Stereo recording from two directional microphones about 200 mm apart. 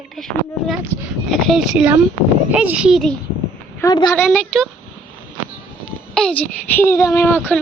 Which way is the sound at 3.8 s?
20° left (ahead or behind).